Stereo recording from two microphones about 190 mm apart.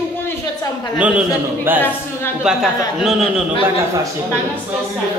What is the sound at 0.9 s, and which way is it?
A man's voice, 5° right (ahead or behind).